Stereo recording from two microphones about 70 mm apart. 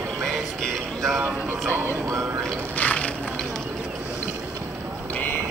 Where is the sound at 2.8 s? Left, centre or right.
Left.